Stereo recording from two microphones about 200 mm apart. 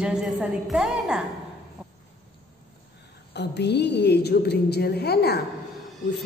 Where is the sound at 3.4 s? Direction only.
60° left (ahead or behind).